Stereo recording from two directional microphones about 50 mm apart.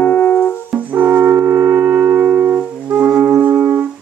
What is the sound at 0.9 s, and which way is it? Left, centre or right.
Music, right.